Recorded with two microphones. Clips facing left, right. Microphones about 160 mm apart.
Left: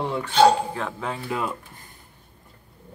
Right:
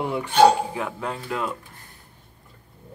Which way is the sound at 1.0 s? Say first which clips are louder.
Left 2 dB; 5° left (ahead or behind).